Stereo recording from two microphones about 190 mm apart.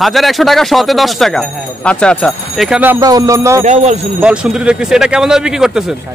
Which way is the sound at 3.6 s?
35° right (ahead or behind).